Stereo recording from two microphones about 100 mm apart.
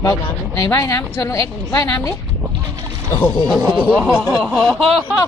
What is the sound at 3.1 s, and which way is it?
Speech, 50° left (ahead or behind).